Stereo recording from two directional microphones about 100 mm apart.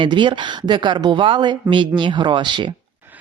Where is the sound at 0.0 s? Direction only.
50° right (ahead or behind).